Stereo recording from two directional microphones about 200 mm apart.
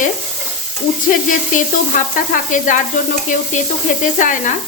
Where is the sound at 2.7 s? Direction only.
40° left (ahead or behind).